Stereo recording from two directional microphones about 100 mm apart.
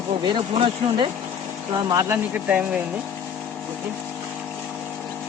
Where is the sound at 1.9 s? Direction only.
30° right (ahead or behind).